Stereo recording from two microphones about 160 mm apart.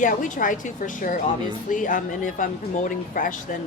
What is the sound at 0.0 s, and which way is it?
Speech, 55° left (ahead or behind).